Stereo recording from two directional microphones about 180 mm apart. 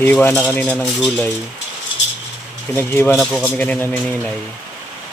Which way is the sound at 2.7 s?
10° left (ahead or behind).